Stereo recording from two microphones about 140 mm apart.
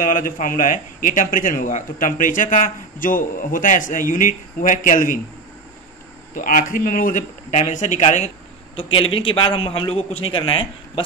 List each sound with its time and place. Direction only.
0.0 s a man's voice: 75° left (ahead or behind)
6.3 s a man's voice: 75° left (ahead or behind); by 8.3 s 60° left (ahead or behind)
8.7 s a man's voice: 40° left (ahead or behind)